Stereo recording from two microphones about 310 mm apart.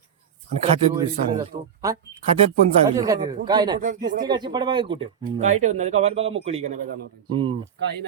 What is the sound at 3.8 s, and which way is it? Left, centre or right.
Speech, right.